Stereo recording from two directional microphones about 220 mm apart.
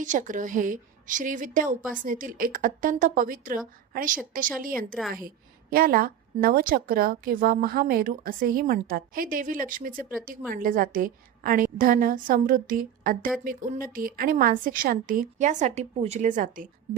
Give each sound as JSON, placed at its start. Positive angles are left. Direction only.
{"t": 0.0, "sound": "a woman's voice", "side_deg": -35}